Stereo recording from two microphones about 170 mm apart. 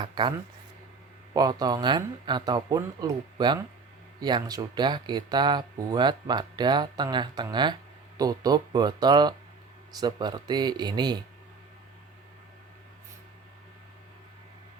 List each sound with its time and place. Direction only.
0.0 s speech: 25° right (ahead or behind)